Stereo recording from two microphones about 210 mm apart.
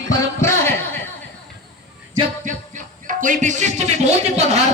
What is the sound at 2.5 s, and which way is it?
Speech, 40° right (ahead or behind).